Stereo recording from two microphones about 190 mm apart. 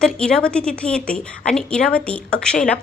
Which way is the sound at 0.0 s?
5° left (ahead or behind).